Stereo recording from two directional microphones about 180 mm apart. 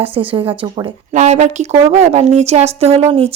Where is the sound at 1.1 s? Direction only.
40° right (ahead or behind).